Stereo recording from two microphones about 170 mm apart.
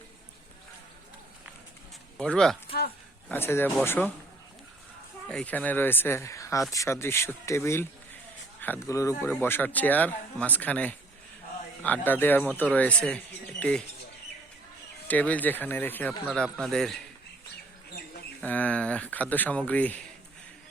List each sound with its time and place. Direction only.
2.1 s speech: 5° left (ahead or behind)
5.3 s speech: 5° left (ahead or behind)
15.0 s speech: 10° left (ahead or behind)
18.3 s speech: 10° left (ahead or behind)